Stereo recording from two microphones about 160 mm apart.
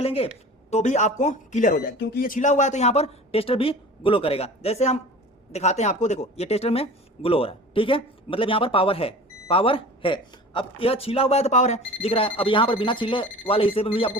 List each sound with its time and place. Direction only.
0.0 s speech: 40° left (ahead or behind)
2.0 s speech: 65° left (ahead or behind); by 14.1 s 35° left (ahead or behind)